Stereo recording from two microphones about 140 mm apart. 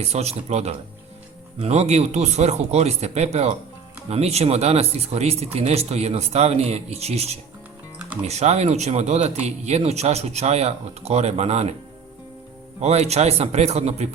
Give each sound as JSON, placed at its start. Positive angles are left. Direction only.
{"t": 0.0, "sound": "speech", "side_deg": -50}
{"t": 12.8, "sound": "speech", "side_deg": -50}